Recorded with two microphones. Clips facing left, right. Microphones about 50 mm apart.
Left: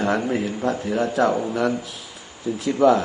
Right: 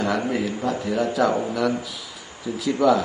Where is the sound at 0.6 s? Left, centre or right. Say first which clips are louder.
Left 1 dB; left.